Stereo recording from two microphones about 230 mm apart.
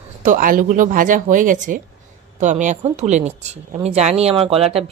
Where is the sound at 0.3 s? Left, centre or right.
Right.